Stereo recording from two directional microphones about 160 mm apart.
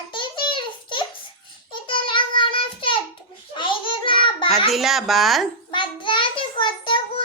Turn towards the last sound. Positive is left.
turn(degrees=30)  # may be behind; listen again after turning